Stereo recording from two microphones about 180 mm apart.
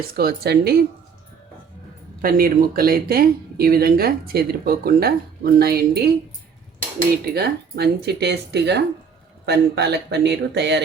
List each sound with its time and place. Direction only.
0.2 s speech: 60° right (ahead or behind)
2.2 s speech: 55° right (ahead or behind)
7.3 s speech: 65° right (ahead or behind)